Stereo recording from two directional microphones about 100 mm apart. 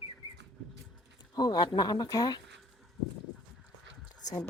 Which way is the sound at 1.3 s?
40° left (ahead or behind).